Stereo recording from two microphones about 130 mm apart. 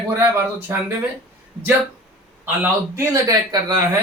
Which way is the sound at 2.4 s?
20° right (ahead or behind).